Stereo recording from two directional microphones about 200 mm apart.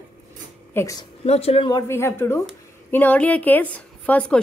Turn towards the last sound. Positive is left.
turn(degrees=5)  # may be behind; listen again after turning